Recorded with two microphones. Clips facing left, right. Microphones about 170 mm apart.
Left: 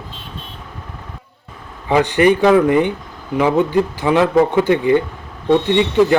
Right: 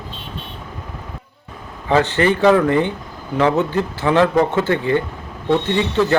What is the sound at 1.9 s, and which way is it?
Speech, 15° left (ahead or behind).